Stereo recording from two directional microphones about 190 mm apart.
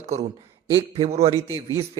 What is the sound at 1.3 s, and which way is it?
Speech, 20° left (ahead or behind).